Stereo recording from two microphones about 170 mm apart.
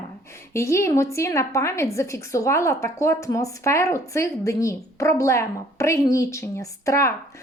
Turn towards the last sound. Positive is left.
turn(degrees=20)  # may be behind; listen again after turning